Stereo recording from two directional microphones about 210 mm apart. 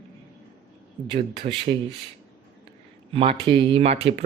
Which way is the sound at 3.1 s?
25° right (ahead or behind).